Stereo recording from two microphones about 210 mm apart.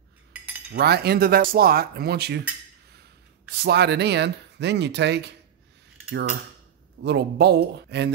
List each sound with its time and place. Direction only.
0.7 s speech: 50° right (ahead or behind)
3.5 s speech: 50° right (ahead or behind)
7.0 s speech: 55° right (ahead or behind)